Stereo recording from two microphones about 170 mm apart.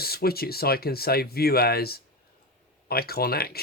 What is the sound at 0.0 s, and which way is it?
Speech, 65° left (ahead or behind).